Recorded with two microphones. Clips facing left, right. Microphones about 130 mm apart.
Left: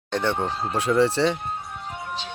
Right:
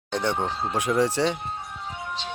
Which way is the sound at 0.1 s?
10° right (ahead or behind).